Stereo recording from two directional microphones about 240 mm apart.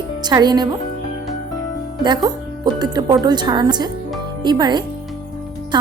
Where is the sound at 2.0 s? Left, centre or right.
Centre.